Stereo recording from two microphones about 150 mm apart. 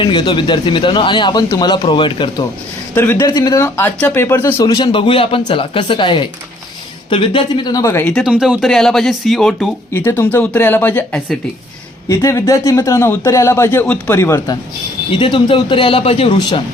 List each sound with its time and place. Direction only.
0.0 s speech: 35° left (ahead or behind)
2.9 s speech: 15° left (ahead or behind)
4.7 s speech: 35° left (ahead or behind)
8.2 s speech: 5° right (ahead or behind)
9.9 s speech: 15° left (ahead or behind)
15.1 s speech: 35° left (ahead or behind)